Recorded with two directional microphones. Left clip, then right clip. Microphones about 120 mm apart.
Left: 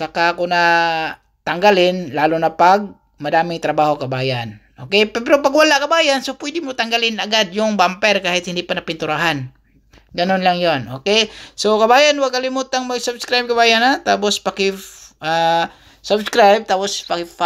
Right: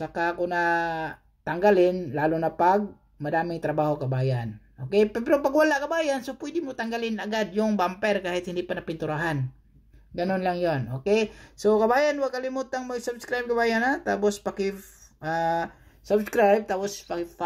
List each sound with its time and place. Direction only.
0.0 s speech: 15° left (ahead or behind)
16.0 s speech: 10° left (ahead or behind)